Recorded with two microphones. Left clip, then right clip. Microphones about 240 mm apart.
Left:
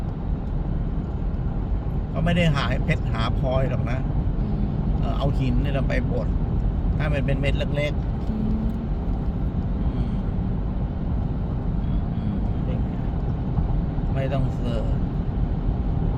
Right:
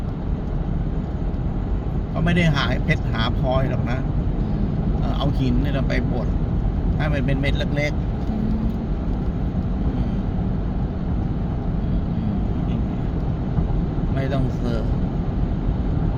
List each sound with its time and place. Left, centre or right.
2.3 s speech: centre
7.0 s speech: centre